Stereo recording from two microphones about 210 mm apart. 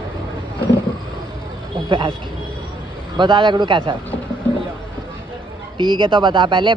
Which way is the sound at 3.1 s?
20° right (ahead or behind).